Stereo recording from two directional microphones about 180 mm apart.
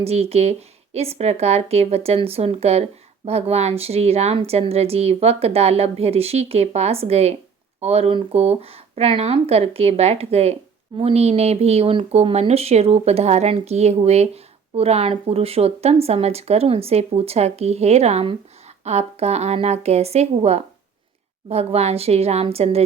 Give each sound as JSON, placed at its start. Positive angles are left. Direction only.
{"t": 0.0, "sound": "speech", "side_deg": -35}